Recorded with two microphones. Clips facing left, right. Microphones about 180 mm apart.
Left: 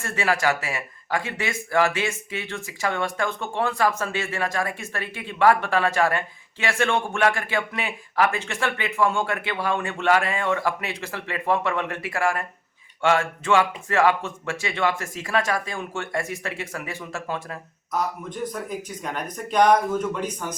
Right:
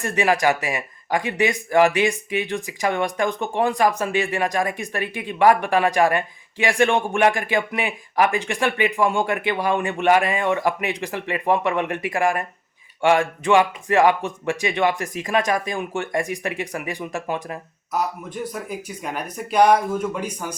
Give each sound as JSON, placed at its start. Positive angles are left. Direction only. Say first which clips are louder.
{"t": 0.0, "sound": "speech", "louder": "right 4 dB", "side_deg": -15}